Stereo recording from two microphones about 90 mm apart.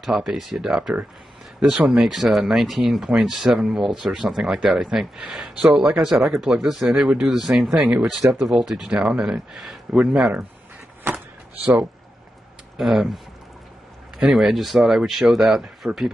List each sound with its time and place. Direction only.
0.0 s speech: 5° right (ahead or behind)
11.1 s a sound: 25° right (ahead or behind)
12.7 s speech: centre (ahead or behind)